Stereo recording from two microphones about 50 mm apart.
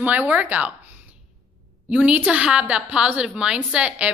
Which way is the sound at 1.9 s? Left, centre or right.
Right.